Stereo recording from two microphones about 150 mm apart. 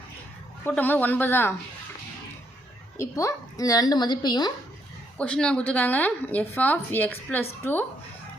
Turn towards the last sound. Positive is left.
turn(degrees=15)  # may be behind; listen again after turning